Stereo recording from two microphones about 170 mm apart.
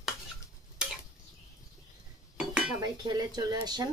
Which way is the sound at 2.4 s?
5° right (ahead or behind).